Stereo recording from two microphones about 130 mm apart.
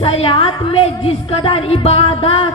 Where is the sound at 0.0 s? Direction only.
50° left (ahead or behind).